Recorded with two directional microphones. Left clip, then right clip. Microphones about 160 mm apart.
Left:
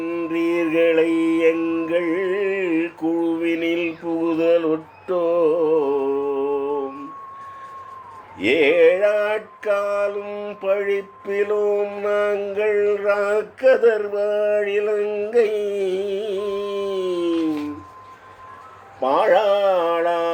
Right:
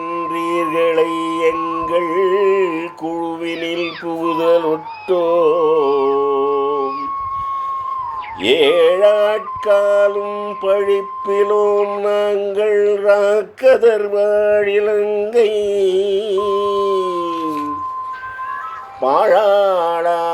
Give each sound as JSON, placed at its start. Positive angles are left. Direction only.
{"t": 0.2, "sound": "mantra", "side_deg": -35}
{"t": 6.0, "sound": "mantra", "side_deg": -45}
{"t": 8.4, "sound": "mantra", "side_deg": -30}
{"t": 19.0, "sound": "mantra", "side_deg": -25}